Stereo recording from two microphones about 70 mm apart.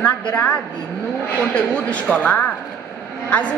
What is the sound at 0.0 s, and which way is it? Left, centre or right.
A woman's voice, left.